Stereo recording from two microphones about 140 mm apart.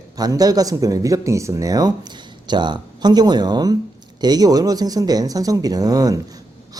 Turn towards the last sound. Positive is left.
turn(degrees=-25)  # may be behind; listen again after turning